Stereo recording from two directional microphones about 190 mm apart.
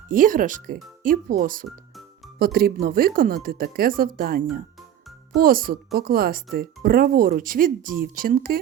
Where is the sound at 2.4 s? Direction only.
50° right (ahead or behind).